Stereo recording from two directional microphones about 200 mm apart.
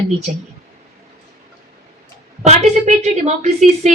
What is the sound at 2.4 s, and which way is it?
A woman's voice, 35° right (ahead or behind).